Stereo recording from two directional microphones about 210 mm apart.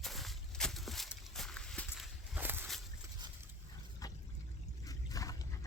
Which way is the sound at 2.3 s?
10° right (ahead or behind).